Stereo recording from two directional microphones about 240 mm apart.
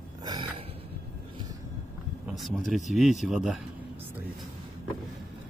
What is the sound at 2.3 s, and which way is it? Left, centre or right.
Speech, centre.